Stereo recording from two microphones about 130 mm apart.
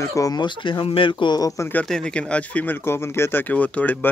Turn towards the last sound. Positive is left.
turn(degrees=15)  # may be behind; listen again after turning